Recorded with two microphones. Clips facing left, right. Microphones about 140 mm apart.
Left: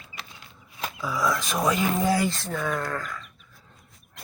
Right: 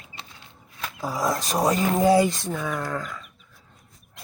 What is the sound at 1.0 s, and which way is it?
Speech, 40° right (ahead or behind).